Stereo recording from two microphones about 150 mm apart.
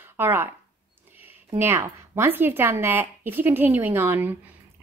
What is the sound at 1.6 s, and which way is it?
Speech, 15° right (ahead or behind).